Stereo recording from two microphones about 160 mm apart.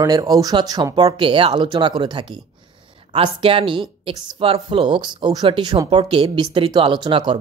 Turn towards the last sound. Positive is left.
turn(degrees=-30)  # may be behind; listen again after turning